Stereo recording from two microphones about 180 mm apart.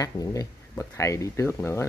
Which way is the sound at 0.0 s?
20° left (ahead or behind).